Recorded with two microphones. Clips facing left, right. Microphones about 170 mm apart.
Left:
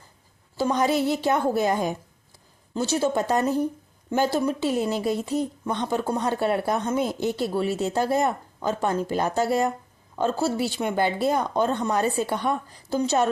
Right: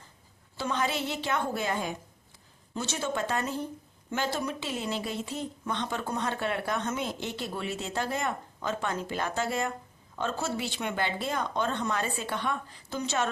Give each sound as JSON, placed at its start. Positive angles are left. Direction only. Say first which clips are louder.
{"t": 0.5, "sound": "speech", "louder": "left 8 dB", "side_deg": 40}